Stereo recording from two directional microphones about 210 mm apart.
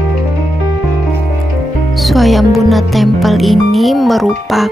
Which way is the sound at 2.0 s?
Centre (ahead or behind).